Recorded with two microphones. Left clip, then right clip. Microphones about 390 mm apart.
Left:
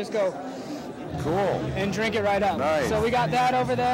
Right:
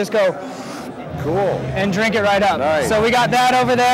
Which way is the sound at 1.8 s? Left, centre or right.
Right.